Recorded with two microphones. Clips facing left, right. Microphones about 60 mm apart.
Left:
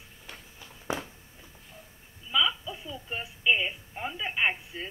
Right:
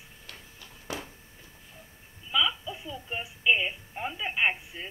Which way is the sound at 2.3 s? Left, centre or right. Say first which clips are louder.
Even; centre.